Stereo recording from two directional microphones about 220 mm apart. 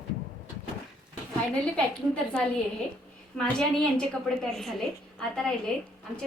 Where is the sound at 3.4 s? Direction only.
5° left (ahead or behind).